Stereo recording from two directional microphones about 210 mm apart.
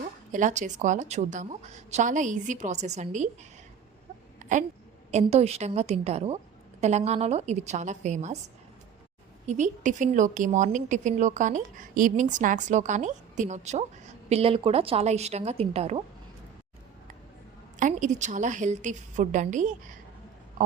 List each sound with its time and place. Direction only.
0.0 s a woman's voice: 35° right (ahead or behind)
4.4 s a sound: 35° right (ahead or behind)
5.1 s a woman's voice: 30° right (ahead or behind)
9.5 s a woman's voice: 35° right (ahead or behind)
17.7 s a woman's voice: 35° right (ahead or behind)
20.6 s a sound: 40° right (ahead or behind)